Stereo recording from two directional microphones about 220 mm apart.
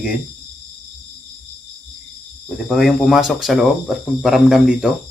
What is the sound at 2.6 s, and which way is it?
Speech, centre (ahead or behind).